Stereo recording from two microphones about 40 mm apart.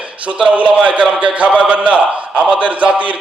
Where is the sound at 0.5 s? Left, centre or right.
Right.